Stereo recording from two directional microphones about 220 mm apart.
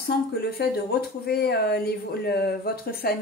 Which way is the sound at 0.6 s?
50° left (ahead or behind).